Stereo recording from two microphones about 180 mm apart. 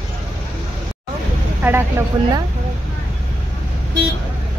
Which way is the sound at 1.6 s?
10° right (ahead or behind).